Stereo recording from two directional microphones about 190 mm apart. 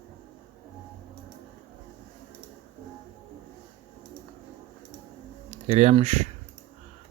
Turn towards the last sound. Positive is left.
turn(degrees=-35)  # may be behind; listen again after turning